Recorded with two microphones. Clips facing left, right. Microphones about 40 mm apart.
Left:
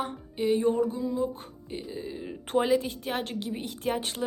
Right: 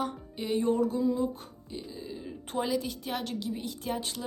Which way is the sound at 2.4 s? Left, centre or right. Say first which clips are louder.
Left 6 dB; left.